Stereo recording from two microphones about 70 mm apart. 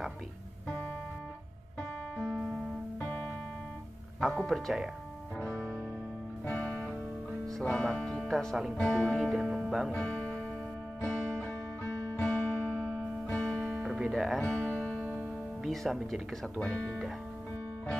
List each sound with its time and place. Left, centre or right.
1.8 s music: centre
4.2 s speech: centre
5.4 s music: centre
7.5 s speech: centre
8.7 s speech: centre
9.1 s speech: centre
9.9 s music: centre
13.8 s music: centre
14.4 s music: centre
15.6 s speech: centre